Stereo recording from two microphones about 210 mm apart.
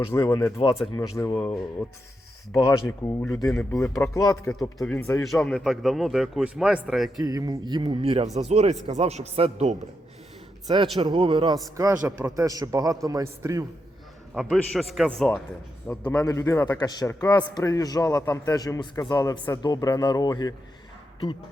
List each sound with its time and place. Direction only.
0.1 s a man's voice: 15° left (ahead or behind)
2.5 s a man's voice: 15° left (ahead or behind); by 7.1 s centre (ahead or behind)
7.2 s speech: 20° right (ahead or behind)
10.9 s a man's voice: 25° right (ahead or behind)
14.3 s a man's voice: centre (ahead or behind); by 20.5 s 20° left (ahead or behind)